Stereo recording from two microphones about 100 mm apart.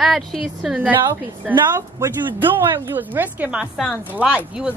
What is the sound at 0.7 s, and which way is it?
Speech, 15° right (ahead or behind).